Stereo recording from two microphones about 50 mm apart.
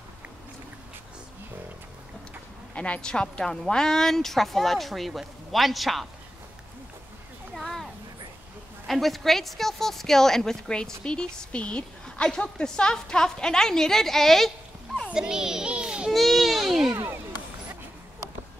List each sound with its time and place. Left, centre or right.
2.7 s speech: left; by 6.0 s centre
7.5 s a sound: centre
8.8 s a woman's voice: centre
15.1 s a child's voice: centre
16.1 s baby cry: centre